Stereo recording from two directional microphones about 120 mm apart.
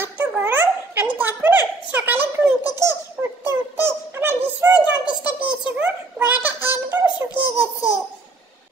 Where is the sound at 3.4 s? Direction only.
20° right (ahead or behind).